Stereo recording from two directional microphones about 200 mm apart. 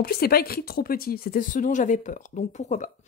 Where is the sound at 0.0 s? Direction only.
50° left (ahead or behind).